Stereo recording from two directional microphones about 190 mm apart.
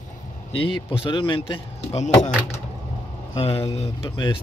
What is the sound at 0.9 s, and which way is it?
Speech, 25° left (ahead or behind).